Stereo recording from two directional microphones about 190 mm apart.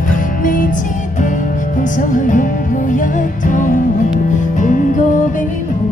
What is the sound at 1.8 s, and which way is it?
Music, 45° left (ahead or behind).